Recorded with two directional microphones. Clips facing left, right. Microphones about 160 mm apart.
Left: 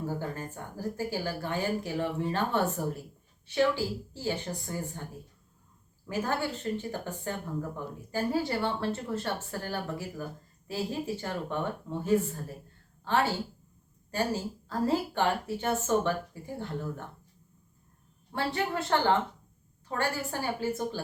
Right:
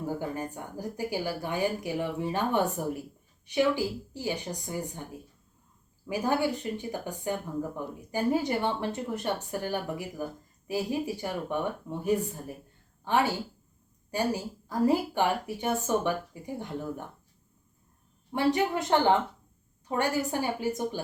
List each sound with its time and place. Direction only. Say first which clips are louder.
0.2 s speech: right 3 dB; 15° right (ahead or behind)
6.1 s speech: right 4 dB; 15° right (ahead or behind)
18.3 s speech: right 5 dB; 15° right (ahead or behind)